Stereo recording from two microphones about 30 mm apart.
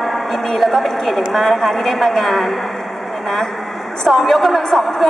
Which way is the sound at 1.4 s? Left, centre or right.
Centre.